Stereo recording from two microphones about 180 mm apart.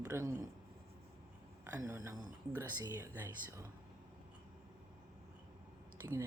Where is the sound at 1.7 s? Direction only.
15° right (ahead or behind).